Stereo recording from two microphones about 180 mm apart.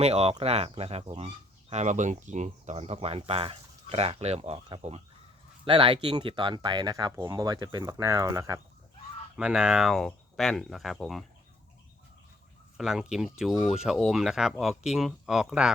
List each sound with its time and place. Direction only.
0.0 s speech: 35° right (ahead or behind); by 8.6 s 15° right (ahead or behind)
9.3 s speech: 5° right (ahead or behind)
12.7 s speech: centre (ahead or behind)